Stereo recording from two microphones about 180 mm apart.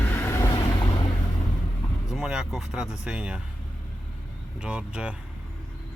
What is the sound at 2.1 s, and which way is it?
Speech, 5° right (ahead or behind).